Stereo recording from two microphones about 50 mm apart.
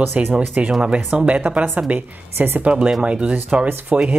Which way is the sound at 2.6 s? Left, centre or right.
Right.